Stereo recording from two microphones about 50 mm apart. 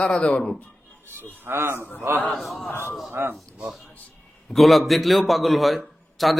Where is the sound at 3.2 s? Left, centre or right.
Right.